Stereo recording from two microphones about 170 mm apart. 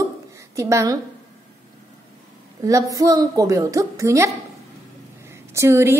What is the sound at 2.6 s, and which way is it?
A woman's voice, 20° right (ahead or behind).